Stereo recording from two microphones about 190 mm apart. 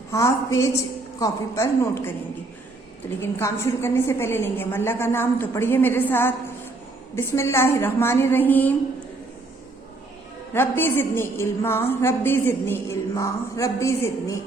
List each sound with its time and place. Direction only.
0.1 s a woman's voice: 15° left (ahead or behind)
3.2 s a woman's voice: 15° left (ahead or behind)
10.5 s a woman's voice: 10° left (ahead or behind)